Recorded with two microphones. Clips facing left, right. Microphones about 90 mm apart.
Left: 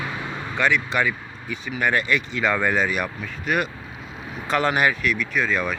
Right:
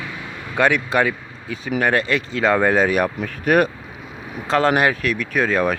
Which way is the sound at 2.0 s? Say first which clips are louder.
Right 3 dB; 35° right (ahead or behind).